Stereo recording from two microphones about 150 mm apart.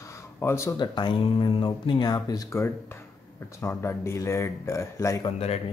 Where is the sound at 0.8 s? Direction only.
30° left (ahead or behind).